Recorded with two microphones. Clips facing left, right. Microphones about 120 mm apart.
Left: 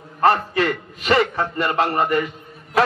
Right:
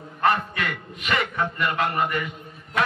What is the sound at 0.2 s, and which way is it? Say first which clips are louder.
A man's voice: left 5 dB; 35° left (ahead or behind).